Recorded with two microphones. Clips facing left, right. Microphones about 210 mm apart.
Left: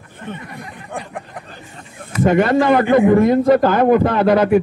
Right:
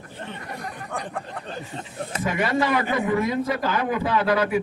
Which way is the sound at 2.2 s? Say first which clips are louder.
Left 10 dB; 55° left (ahead or behind).